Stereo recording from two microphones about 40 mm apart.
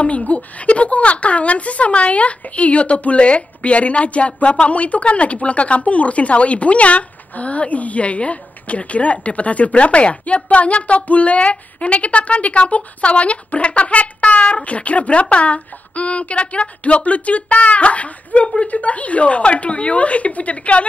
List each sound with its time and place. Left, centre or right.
0.0 s speech: left